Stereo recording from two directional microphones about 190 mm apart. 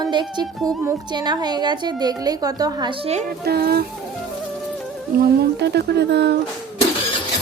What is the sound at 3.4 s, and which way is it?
Speech, 55° right (ahead or behind).